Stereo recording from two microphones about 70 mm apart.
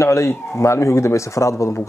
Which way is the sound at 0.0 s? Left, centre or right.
Left.